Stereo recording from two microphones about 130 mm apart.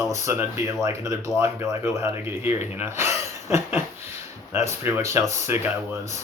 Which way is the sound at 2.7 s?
15° right (ahead or behind).